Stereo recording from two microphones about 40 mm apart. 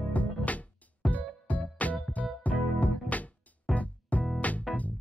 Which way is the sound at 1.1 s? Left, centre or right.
Left.